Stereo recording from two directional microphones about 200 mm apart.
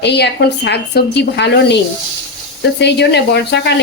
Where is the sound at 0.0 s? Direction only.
55° left (ahead or behind).